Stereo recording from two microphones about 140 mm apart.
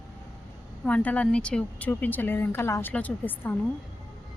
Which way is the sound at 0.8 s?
10° left (ahead or behind).